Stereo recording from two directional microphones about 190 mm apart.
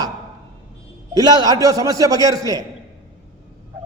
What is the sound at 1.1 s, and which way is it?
A man's voice, 20° right (ahead or behind).